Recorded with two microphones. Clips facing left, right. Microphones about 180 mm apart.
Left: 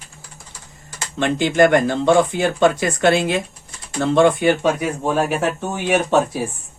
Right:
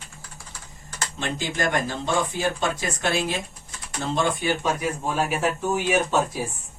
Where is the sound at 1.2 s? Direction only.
70° left (ahead or behind).